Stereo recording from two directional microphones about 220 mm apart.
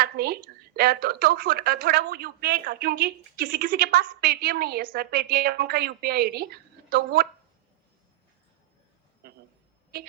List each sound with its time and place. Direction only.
0.0 s a woman's voice: 45° right (ahead or behind)
9.2 s a sound: 45° right (ahead or behind)
9.9 s a woman's voice: 45° right (ahead or behind)